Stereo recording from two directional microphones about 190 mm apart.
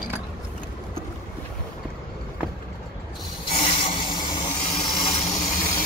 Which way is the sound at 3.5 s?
25° left (ahead or behind).